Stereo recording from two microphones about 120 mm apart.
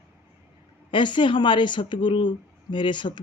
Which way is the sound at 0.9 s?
40° left (ahead or behind).